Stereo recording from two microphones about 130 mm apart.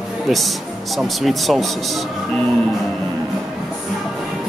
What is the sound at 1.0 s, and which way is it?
Speech, centre (ahead or behind).